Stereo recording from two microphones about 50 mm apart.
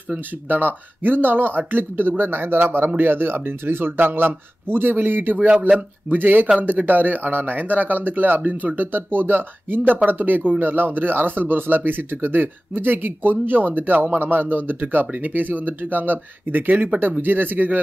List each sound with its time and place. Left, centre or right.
0.5 s speech: right